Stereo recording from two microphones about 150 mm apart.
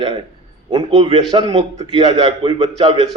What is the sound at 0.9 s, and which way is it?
A man's voice, 45° right (ahead or behind).